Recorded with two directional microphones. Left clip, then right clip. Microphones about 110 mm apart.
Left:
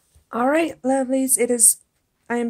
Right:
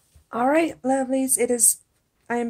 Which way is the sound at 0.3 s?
30° left (ahead or behind).